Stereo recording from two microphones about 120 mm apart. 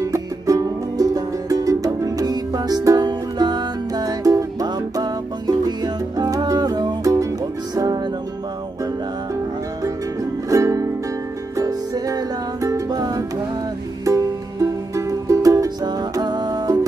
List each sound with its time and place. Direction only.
0.0 s music: 25° right (ahead or behind)
10.5 s music: 25° right (ahead or behind)